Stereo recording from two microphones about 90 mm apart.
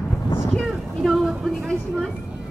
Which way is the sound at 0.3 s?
25° left (ahead or behind).